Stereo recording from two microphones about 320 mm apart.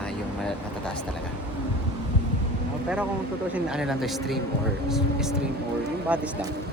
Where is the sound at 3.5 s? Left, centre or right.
Centre.